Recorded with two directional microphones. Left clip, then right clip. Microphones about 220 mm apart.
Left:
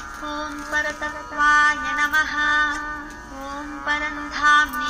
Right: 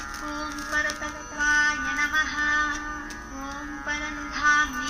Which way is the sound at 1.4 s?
25° left (ahead or behind).